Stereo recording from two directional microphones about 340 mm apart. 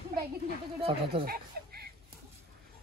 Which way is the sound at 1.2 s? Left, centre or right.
Right.